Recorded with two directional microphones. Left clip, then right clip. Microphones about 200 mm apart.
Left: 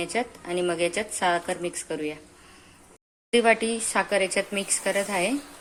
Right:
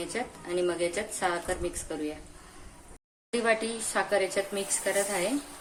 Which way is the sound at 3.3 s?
25° left (ahead or behind).